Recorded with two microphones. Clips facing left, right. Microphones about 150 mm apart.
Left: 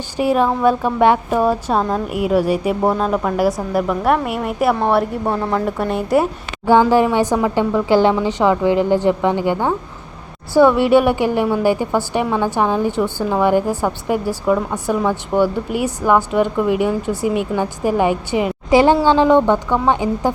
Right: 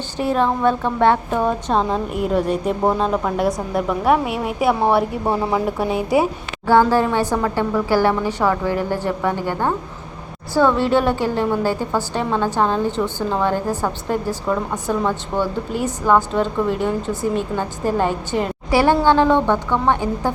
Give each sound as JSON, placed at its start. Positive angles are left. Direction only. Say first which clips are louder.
{"t": 0.2, "sound": "a woman's voice", "louder": "left 3 dB", "side_deg": 10}
{"t": 6.7, "sound": "a woman's voice", "louder": "left 2 dB", "side_deg": 15}